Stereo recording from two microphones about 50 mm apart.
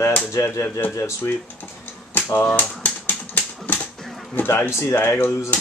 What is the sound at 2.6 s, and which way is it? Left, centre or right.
Speech, left.